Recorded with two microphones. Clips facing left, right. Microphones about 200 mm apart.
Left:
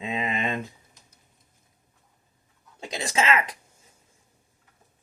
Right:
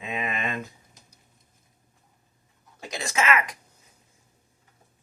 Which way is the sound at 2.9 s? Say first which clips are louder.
Left 1 dB; 30° left (ahead or behind).